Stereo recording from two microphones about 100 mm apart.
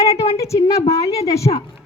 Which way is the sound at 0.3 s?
30° left (ahead or behind).